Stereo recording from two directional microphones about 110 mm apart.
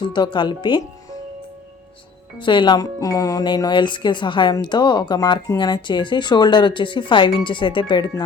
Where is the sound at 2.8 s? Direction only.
30° left (ahead or behind).